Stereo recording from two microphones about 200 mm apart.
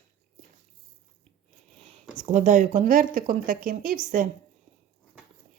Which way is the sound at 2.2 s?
40° right (ahead or behind).